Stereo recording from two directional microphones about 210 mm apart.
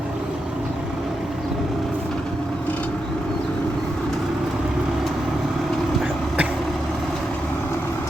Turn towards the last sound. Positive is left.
turn(degrees=-5)  # may be behind; listen again after turning